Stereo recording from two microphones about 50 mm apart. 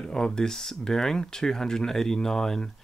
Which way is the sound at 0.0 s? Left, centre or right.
Centre.